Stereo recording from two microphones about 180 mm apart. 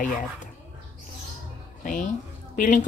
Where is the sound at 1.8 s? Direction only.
45° left (ahead or behind).